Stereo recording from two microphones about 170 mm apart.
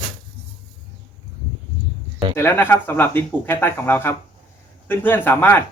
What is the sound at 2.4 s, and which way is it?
Speech, 15° left (ahead or behind).